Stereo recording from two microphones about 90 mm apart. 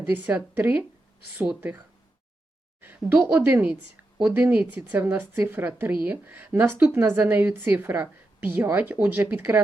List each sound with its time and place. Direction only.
0.1 s a woman's voice: 20° right (ahead or behind)
2.8 s a woman's voice: 20° right (ahead or behind)